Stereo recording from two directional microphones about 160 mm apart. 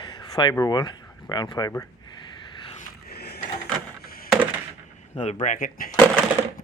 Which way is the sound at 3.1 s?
85° left.